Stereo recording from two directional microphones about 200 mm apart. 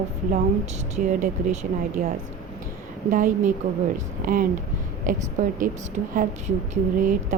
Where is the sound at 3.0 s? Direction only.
40° right (ahead or behind).